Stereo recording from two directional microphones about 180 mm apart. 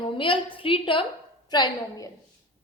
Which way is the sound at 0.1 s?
30° left (ahead or behind).